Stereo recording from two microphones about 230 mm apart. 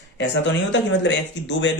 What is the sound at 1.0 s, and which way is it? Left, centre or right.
Speech, left.